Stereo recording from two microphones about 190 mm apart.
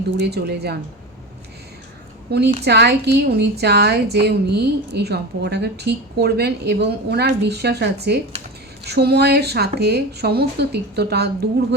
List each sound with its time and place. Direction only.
0.2 s a woman's voice: 60° right (ahead or behind)
2.3 s a woman's voice: 60° right (ahead or behind)